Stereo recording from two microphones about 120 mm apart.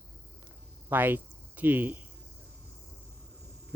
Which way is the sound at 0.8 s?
15° right (ahead or behind).